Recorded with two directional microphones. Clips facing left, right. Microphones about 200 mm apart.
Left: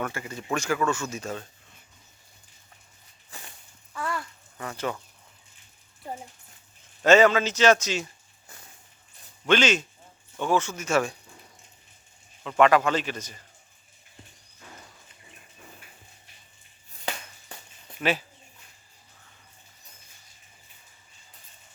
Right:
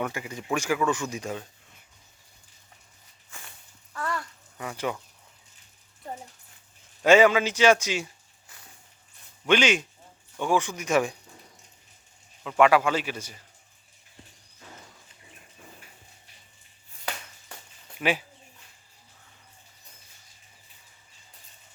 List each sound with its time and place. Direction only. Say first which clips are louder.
0.0 s a man's voice: right 1 dB; 15° right (ahead or behind)
3.2 s walk: left 2 dB; 35° left (ahead or behind)
3.9 s a sound: even; 5° left (ahead or behind)
4.5 s speech: even; 10° right (ahead or behind)
7.0 s a man's voice: even; 10° right (ahead or behind)
9.5 s a man's voice: even; 10° right (ahead or behind)
12.4 s a man's voice: even; 5° right (ahead or behind)
18.0 s a man's voice: even; 10° right (ahead or behind)